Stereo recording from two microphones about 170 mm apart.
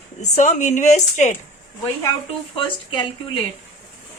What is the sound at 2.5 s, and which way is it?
Speech, 30° left (ahead or behind).